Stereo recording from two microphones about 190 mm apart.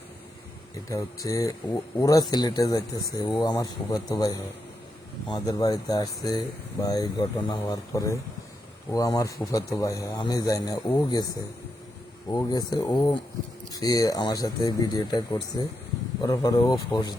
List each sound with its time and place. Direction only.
0.9 s speech: 15° left (ahead or behind)
12.3 s speech: 20° left (ahead or behind)